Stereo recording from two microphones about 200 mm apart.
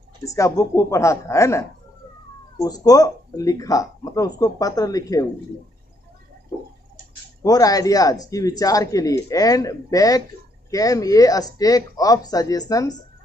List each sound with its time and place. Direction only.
0.2 s speech: 15° left (ahead or behind)
7.4 s speech: 20° left (ahead or behind)